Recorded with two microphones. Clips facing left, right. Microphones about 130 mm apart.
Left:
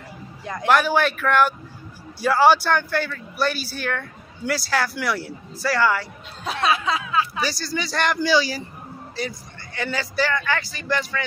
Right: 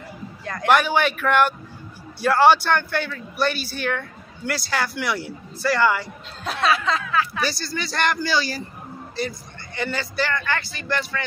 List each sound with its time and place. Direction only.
0.7 s speech: centre (ahead or behind)
6.7 s a man's voice: 15° left (ahead or behind)
9.8 s a man's voice: 5° left (ahead or behind)